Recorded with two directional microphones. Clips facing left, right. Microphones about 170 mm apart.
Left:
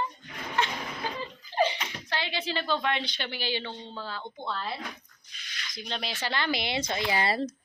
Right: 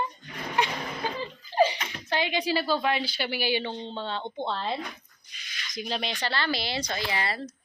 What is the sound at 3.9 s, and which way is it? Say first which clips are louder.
Speech: right 5 dB; 25° right (ahead or behind).